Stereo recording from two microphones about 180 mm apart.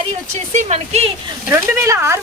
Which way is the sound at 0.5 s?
40° right (ahead or behind).